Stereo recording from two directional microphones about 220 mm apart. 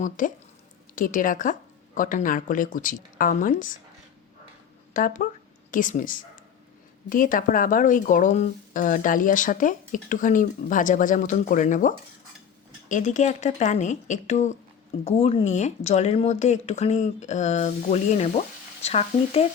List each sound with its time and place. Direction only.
0.2 s speech: 35° left (ahead or behind)
4.9 s speech: 35° left (ahead or behind)